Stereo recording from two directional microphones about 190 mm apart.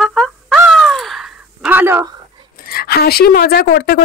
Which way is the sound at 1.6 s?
10° right (ahead or behind).